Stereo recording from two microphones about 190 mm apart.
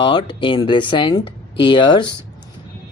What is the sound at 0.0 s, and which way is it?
Speech, 25° left (ahead or behind).